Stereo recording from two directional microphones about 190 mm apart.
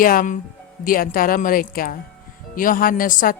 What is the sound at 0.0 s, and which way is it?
Speech, 45° left (ahead or behind).